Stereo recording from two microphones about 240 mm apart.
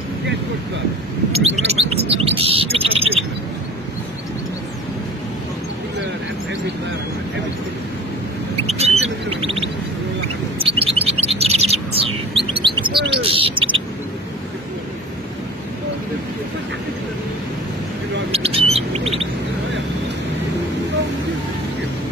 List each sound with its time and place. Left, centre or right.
1.3 s chirp: right
8.5 s a sound: right
10.6 s chirp: right
13.1 s bird: right
18.3 s bird: right